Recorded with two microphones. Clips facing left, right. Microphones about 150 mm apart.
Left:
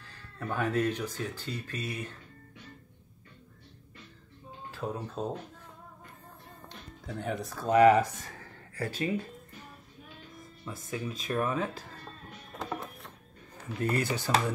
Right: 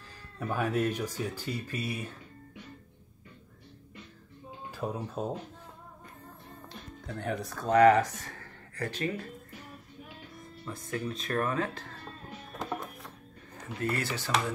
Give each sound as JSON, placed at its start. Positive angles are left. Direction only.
{"t": 0.1, "sound": "speech", "side_deg": -10}
{"t": 4.6, "sound": "speech", "side_deg": -10}
{"t": 6.7, "sound": "speech", "side_deg": 0}
{"t": 10.6, "sound": "speech", "side_deg": 5}
{"t": 12.3, "sound": "music", "side_deg": 0}
{"t": 13.7, "sound": "speech", "side_deg": 15}